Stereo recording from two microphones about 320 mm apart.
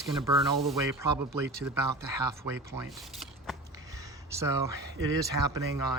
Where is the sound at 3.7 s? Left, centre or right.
Centre.